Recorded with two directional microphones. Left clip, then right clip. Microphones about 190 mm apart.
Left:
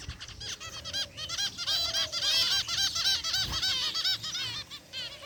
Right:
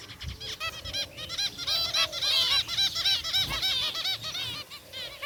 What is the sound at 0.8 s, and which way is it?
Goose, 15° left (ahead or behind).